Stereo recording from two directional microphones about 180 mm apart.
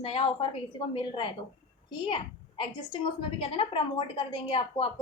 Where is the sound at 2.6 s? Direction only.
25° left (ahead or behind).